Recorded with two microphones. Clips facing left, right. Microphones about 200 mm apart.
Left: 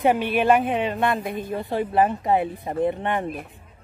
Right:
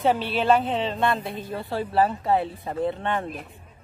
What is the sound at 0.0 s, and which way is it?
Speech, 15° left (ahead or behind).